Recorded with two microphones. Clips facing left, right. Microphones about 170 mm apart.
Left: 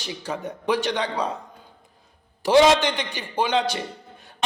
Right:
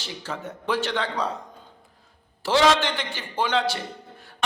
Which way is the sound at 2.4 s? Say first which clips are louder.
Left 4 dB; 15° left (ahead or behind).